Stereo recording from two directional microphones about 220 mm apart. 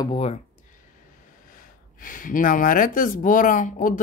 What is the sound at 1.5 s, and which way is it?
Speech, 40° left (ahead or behind).